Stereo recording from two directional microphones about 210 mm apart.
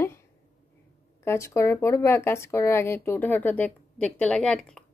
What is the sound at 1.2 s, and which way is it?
Speech, 15° left (ahead or behind).